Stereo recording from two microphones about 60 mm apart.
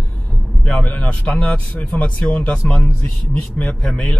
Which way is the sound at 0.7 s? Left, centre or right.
Left.